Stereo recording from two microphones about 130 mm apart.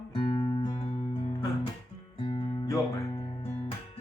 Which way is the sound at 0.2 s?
35° left (ahead or behind).